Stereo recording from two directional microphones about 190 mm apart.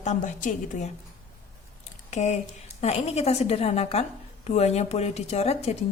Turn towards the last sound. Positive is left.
turn(degrees=35)  # may be behind; listen again after turning